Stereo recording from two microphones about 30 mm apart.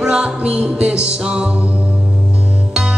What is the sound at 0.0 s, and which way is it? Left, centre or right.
Music, right.